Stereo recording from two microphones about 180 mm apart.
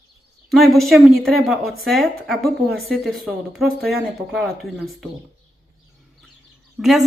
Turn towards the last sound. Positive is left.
turn(degrees=0)  # may be behind; listen again after turning